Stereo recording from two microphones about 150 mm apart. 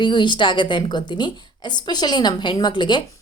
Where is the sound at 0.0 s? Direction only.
30° left (ahead or behind).